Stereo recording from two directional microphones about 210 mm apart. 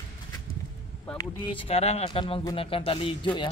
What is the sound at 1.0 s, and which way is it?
Speech, 20° left (ahead or behind).